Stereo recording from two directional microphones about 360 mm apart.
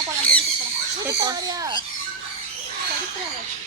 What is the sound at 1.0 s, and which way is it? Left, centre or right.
Speech, centre.